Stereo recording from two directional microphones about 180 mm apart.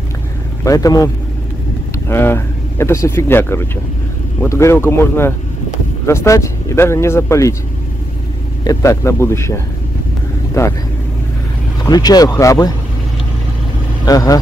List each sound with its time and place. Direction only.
0.7 s speech: 20° left (ahead or behind)
8.6 s speech: 15° left (ahead or behind)
11.8 s speech: 20° left (ahead or behind)
14.0 s speech: 20° left (ahead or behind)